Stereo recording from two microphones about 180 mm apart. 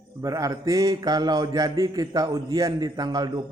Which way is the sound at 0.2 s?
20° right (ahead or behind).